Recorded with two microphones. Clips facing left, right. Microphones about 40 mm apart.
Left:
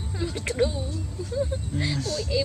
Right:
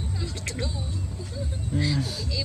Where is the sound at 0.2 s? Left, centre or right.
Left.